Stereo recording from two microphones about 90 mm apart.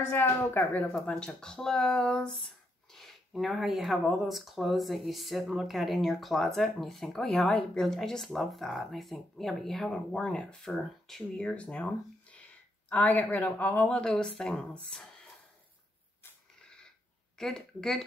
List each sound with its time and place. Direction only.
0.1 s a woman's voice: 25° left (ahead or behind)
1.1 s speech: 10° left (ahead or behind)
17.4 s speech: 5° left (ahead or behind)